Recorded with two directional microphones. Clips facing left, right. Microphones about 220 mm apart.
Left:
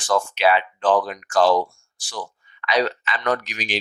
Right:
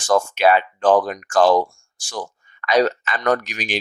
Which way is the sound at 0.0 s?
45° right (ahead or behind).